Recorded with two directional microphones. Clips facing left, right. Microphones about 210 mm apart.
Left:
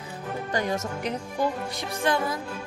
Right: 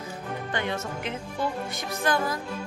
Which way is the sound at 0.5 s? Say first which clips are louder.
Left 3 dB; 40° left (ahead or behind).